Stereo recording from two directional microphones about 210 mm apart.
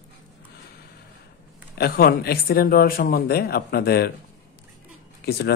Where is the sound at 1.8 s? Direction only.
45° left (ahead or behind).